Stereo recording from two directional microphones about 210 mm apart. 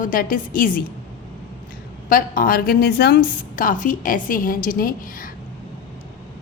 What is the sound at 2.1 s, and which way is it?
A woman's voice, 40° left (ahead or behind).